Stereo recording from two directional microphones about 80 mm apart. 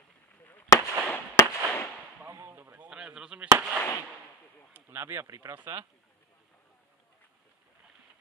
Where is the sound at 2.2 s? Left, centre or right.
Right.